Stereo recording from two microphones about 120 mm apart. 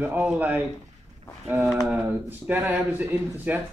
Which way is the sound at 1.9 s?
15° right (ahead or behind).